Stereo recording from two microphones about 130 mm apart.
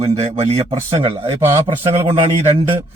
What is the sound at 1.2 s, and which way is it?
Speech, 20° right (ahead or behind).